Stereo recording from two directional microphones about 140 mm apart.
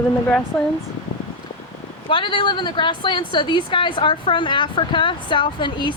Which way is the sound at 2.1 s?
35° left (ahead or behind).